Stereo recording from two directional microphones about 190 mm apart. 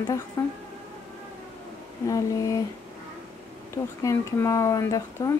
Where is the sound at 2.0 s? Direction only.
15° left (ahead or behind).